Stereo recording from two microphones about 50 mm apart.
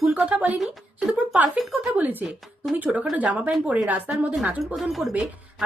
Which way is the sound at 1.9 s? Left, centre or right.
Right.